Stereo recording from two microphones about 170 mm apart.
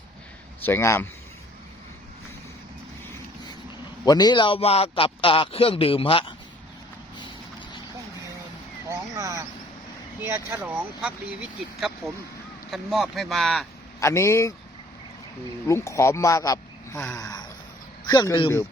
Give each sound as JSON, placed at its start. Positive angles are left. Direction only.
{"t": 0.6, "sound": "a man's voice", "side_deg": 15}
{"t": 4.0, "sound": "a man's voice", "side_deg": 25}
{"t": 8.9, "sound": "speech", "side_deg": -15}
{"t": 14.0, "sound": "speech", "side_deg": 15}
{"t": 15.6, "sound": "speech", "side_deg": 15}